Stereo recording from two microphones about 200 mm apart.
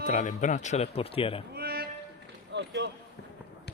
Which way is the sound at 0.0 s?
40° left (ahead or behind).